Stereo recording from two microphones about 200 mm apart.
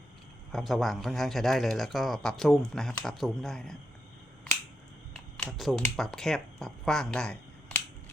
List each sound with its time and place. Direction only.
0.5 s speech: centre (ahead or behind)
5.1 s speech: centre (ahead or behind)